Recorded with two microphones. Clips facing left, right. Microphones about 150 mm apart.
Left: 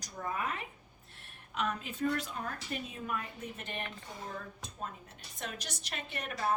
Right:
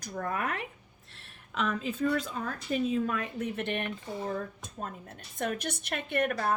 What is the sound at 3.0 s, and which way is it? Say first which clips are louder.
Speech: right 7 dB; 90° right.